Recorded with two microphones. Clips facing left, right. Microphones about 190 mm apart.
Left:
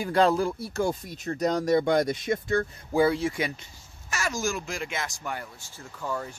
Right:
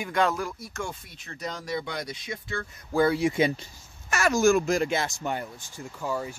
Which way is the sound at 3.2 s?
20° right (ahead or behind).